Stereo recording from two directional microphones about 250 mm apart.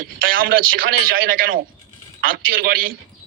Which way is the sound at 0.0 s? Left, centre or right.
Right.